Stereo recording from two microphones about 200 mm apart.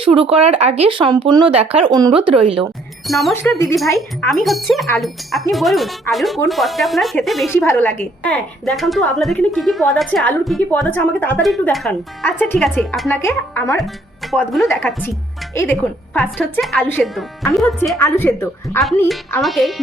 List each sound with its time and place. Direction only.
0.0 s speech: 30° right (ahead or behind)
3.1 s speech: centre (ahead or behind)
3.8 s a woman's voice: 15° left (ahead or behind)
4.4 s speech: centre (ahead or behind)
7.5 s a woman's voice: 10° left (ahead or behind)
13.7 s a woman's voice: centre (ahead or behind)
19.0 s speech: centre (ahead or behind)